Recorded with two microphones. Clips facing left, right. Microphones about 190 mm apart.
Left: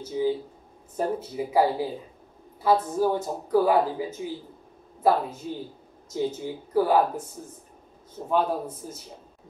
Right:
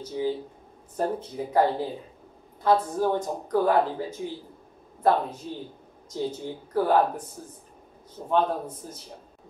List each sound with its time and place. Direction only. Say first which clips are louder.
0.2 s speech: left 3 dB; 5° left (ahead or behind)
8.3 s speech: even; 5° left (ahead or behind)